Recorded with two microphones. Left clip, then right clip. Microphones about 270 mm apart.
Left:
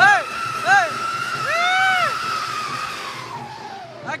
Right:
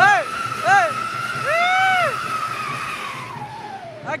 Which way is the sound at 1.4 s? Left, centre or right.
Centre.